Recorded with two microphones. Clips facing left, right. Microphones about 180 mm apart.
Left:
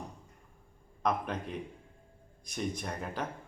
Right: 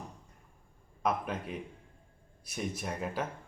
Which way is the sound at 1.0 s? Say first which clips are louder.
Even; 5° right (ahead or behind).